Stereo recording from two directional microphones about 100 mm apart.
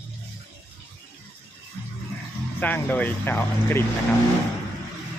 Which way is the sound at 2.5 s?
15° left (ahead or behind).